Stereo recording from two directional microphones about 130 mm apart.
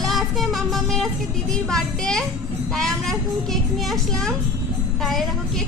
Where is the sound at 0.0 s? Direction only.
Centre (ahead or behind).